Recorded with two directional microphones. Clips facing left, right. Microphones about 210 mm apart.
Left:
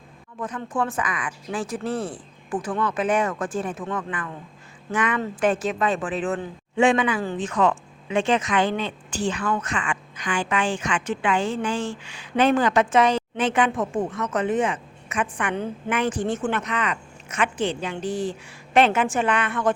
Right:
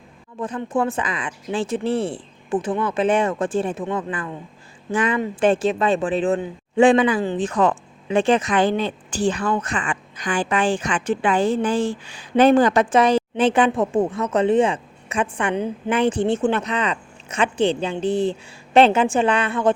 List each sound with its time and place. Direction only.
0.3 s speech: 30° right (ahead or behind)